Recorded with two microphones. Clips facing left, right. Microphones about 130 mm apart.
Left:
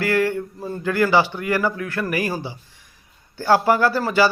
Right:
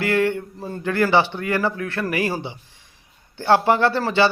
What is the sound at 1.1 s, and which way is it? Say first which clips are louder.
Speech: even; 20° right (ahead or behind).